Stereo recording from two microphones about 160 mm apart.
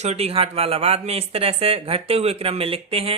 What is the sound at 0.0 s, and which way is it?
Speech, 40° right (ahead or behind).